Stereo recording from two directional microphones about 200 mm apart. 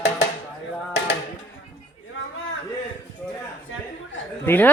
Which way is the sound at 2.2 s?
75° left (ahead or behind).